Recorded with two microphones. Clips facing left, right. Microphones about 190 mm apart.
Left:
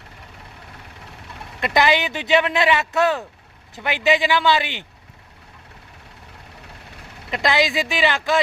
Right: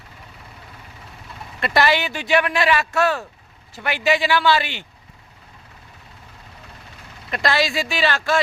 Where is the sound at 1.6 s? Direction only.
15° left (ahead or behind).